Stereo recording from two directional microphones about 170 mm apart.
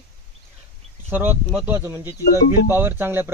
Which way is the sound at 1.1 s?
10° right (ahead or behind).